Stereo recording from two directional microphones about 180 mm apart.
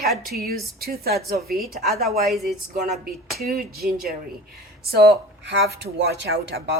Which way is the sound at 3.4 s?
55° right (ahead or behind).